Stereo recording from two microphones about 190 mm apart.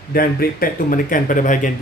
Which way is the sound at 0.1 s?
50° left (ahead or behind).